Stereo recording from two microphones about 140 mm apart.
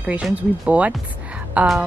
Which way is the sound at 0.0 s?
10° right (ahead or behind).